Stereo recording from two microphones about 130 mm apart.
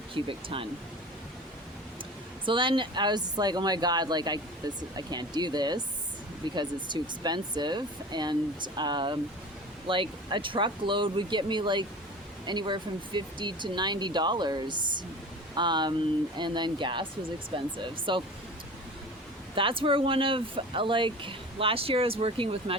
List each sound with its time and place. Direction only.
0.1 s speech: 45° right (ahead or behind)
2.4 s speech: 40° right (ahead or behind)
19.5 s speech: 45° right (ahead or behind)